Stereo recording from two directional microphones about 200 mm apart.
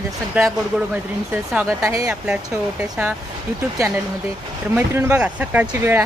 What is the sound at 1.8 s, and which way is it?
Speech, 15° right (ahead or behind).